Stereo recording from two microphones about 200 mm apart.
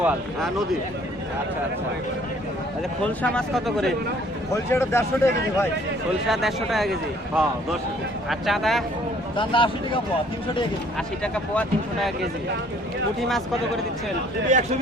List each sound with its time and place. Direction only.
0.0 s speech: centre (ahead or behind)
3.0 s speech: 5° left (ahead or behind)
4.5 s speech: 15° left (ahead or behind)
6.2 s speech: centre (ahead or behind)
8.3 s speech: centre (ahead or behind)
9.3 s speech: 25° left (ahead or behind)
10.9 s speech: 5° left (ahead or behind)
14.5 s a man's voice: 40° right (ahead or behind)